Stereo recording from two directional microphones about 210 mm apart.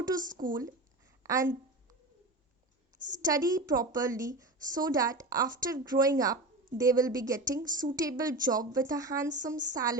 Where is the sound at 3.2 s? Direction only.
15° right (ahead or behind).